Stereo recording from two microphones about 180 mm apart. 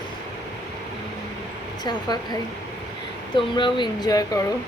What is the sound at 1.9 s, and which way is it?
Speech, 25° left (ahead or behind).